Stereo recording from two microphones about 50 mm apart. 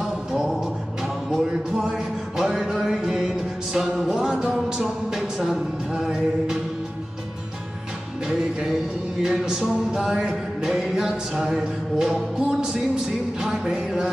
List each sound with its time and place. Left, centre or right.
0.0 s music: centre
8.3 s music: centre